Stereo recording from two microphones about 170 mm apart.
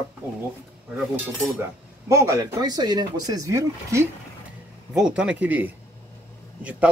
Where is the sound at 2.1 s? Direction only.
20° right (ahead or behind).